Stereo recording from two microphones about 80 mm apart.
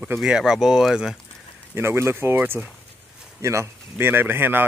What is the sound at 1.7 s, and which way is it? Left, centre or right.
Speech, right.